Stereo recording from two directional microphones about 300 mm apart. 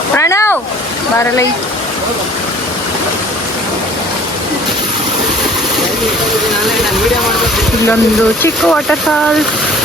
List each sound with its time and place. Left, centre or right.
0.2 s speech: centre
8.4 s speech: centre